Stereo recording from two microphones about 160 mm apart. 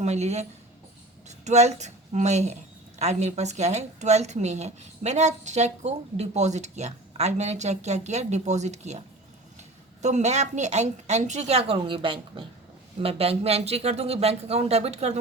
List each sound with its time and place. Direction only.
0.0 s a woman's voice: 45° right (ahead or behind)